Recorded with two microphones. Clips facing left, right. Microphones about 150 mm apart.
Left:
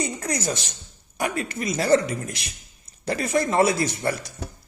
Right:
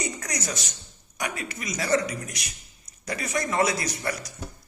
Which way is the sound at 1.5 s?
30° left (ahead or behind).